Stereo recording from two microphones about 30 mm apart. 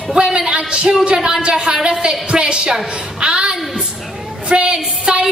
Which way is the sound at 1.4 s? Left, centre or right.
Right.